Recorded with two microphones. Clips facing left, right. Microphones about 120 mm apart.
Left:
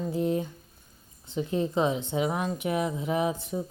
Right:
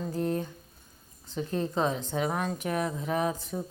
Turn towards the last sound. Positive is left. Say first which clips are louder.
# left 2 dB
turn(degrees=15)  # may be behind; listen again after turning